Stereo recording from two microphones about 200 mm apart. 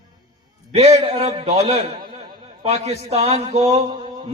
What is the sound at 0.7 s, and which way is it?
A man's voice, 30° right (ahead or behind).